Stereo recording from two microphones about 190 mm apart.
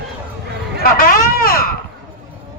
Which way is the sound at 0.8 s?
50° left (ahead or behind).